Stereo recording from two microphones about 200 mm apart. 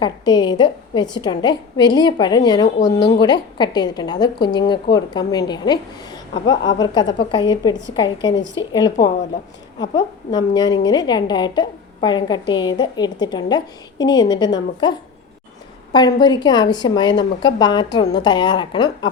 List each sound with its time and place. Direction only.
0.0 s a woman's voice: 20° left (ahead or behind)
8.4 s speech: 65° left (ahead or behind)
9.7 s a woman's voice: 20° left (ahead or behind)